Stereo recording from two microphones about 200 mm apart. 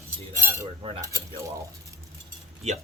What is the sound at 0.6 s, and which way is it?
Cutlery, 30° right (ahead or behind).